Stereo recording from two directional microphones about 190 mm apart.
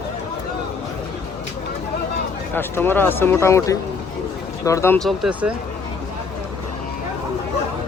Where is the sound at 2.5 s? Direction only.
10° left (ahead or behind).